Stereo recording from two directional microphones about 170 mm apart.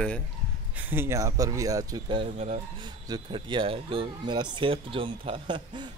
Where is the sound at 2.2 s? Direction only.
40° right (ahead or behind).